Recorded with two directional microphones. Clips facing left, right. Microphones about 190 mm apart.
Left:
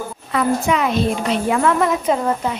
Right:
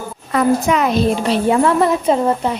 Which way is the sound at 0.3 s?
45° right (ahead or behind).